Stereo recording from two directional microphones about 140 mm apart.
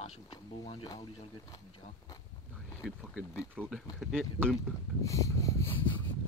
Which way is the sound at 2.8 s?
5° right (ahead or behind).